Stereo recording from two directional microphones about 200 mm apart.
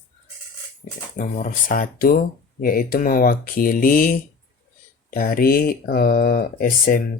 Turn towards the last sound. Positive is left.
turn(degrees=45)  # may be behind; listen again after turning